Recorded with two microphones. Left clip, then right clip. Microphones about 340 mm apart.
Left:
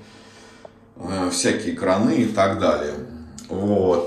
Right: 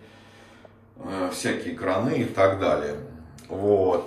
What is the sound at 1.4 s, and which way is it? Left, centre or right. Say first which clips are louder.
Speech: left 6 dB; centre.